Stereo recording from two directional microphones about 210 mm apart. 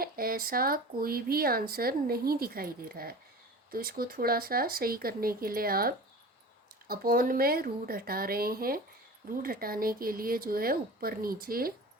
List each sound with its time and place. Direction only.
0.0 s speech: 45° right (ahead or behind)